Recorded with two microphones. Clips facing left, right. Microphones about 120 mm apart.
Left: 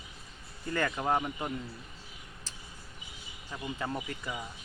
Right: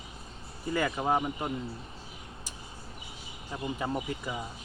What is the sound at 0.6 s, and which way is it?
Speech, 10° right (ahead or behind).